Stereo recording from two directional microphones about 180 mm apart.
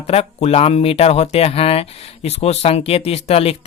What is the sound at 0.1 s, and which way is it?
Speech, 35° left (ahead or behind).